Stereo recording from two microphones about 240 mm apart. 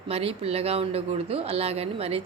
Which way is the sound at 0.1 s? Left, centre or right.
Right.